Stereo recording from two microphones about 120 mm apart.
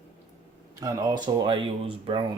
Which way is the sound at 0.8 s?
30° right (ahead or behind).